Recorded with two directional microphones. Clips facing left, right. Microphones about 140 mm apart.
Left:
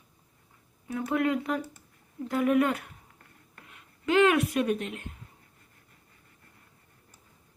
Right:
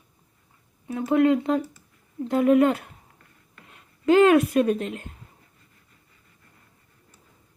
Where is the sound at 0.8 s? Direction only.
25° right (ahead or behind).